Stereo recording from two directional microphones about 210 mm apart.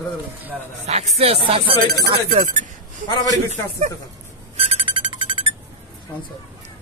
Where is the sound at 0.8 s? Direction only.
35° right (ahead or behind).